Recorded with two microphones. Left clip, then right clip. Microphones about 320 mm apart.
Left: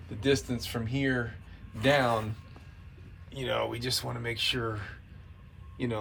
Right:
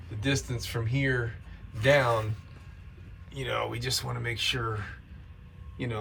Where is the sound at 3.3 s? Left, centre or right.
Centre.